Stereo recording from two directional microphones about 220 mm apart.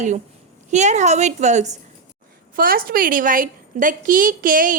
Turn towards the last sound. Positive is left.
turn(degrees=-40)  # may be behind; listen again after turning